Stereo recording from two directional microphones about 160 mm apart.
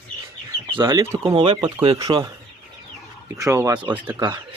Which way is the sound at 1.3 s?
35° right (ahead or behind).